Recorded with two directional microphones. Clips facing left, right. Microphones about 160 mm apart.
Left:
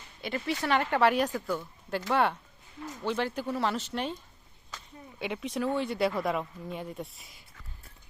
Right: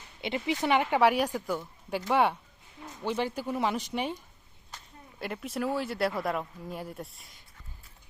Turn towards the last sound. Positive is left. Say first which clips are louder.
# left 1 dB
turn(degrees=0)  # may be behind; listen again after turning